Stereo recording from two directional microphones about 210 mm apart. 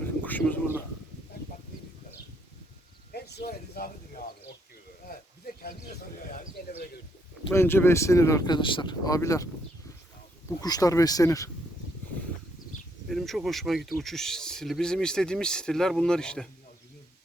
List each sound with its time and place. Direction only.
0.3 s speech: 10° left (ahead or behind)
3.1 s a sound: 50° left (ahead or behind)
7.5 s speech: 10° left (ahead or behind)
10.6 s speech: 15° left (ahead or behind)
13.1 s speech: centre (ahead or behind)